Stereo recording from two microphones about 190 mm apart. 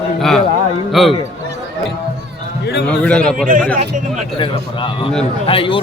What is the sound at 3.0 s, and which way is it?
Speech, 5° left (ahead or behind).